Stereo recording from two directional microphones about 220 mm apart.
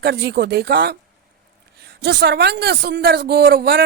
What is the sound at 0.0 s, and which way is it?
A woman's voice, 50° right (ahead or behind).